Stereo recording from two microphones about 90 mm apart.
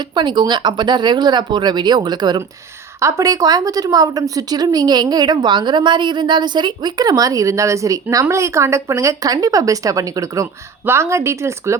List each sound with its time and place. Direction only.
0.0 s speech: 60° right (ahead or behind)
3.0 s speech: 35° right (ahead or behind)